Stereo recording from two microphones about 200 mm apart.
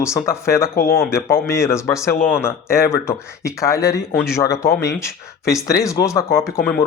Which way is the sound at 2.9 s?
15° left (ahead or behind).